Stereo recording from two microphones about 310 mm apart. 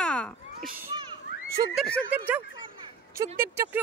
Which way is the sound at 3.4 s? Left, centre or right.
Centre.